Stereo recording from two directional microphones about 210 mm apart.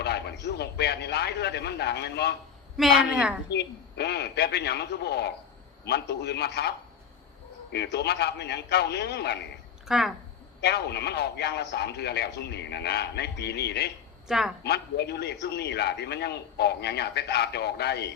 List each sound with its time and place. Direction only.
0.0 s a man's voice: 50° left (ahead or behind)
3.5 s a man's voice: 50° left (ahead or behind)
9.8 s speech: centre (ahead or behind)
10.6 s a man's voice: 50° left (ahead or behind)
14.3 s speech: centre (ahead or behind)
14.6 s a man's voice: 50° left (ahead or behind)